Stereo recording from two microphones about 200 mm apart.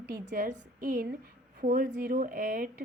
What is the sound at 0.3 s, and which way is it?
Speech, 40° right (ahead or behind).